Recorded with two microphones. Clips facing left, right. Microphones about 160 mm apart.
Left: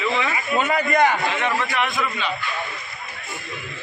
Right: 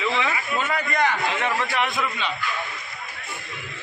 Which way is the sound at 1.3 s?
5° right (ahead or behind).